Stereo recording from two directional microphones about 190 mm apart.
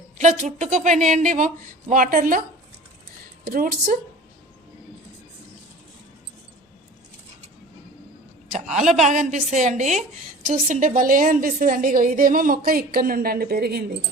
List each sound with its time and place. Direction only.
0.2 s a woman's voice: 40° right (ahead or behind)
3.4 s a woman's voice: 50° right (ahead or behind)
9.0 s a woman's voice: 40° right (ahead or behind); by 13.9 s 60° right (ahead or behind)